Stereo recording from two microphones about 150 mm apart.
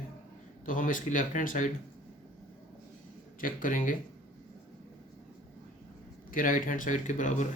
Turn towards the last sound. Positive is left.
turn(degrees=55)  # may be behind; listen again after turning